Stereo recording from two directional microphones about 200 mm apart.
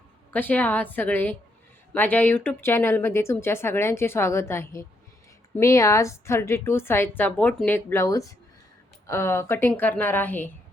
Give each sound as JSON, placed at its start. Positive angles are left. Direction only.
{"t": 0.3, "sound": "speech", "side_deg": 10}